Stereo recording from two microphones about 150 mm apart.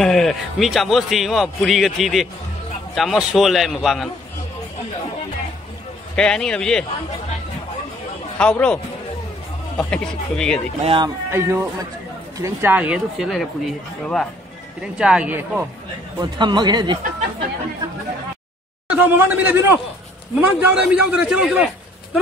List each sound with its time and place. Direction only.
0.0 s a man's voice: centre (ahead or behind)
6.1 s a man's voice: 5° left (ahead or behind)
8.4 s speech: 5° left (ahead or behind)
9.8 s a man's voice: 10° left (ahead or behind)
10.8 s speech: 35° right (ahead or behind)
11.2 s a man's voice: 15° right (ahead or behind)
16.2 s speech: 30° right (ahead or behind)
18.9 s a man's voice: 15° right (ahead or behind)